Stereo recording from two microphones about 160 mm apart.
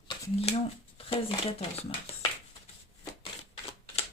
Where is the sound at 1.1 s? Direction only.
40° left (ahead or behind).